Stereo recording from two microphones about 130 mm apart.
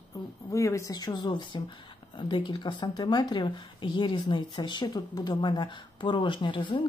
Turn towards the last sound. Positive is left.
turn(degrees=40)  # may be behind; listen again after turning